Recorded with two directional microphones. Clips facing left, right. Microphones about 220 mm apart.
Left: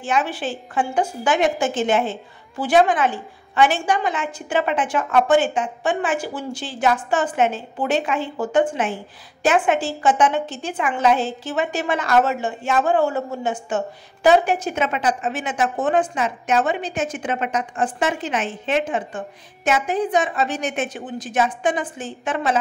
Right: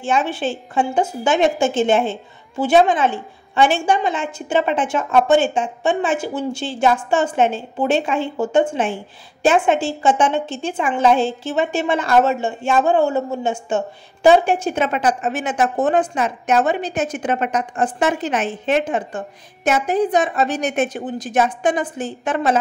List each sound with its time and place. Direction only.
0.0 s a woman's voice: 25° right (ahead or behind)
14.9 s a woman's voice: 45° right (ahead or behind)